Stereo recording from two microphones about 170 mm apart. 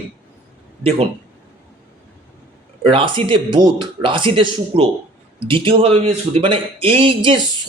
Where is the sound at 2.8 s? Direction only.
30° right (ahead or behind).